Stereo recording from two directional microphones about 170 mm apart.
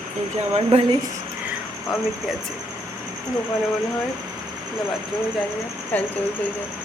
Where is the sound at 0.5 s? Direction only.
35° right (ahead or behind).